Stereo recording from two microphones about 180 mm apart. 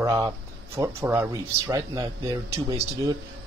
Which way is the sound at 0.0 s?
15° right (ahead or behind).